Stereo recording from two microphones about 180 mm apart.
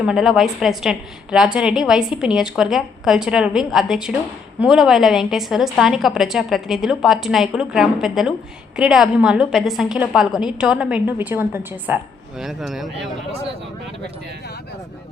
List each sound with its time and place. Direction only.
0.0 s a woman's voice: 5° right (ahead or behind)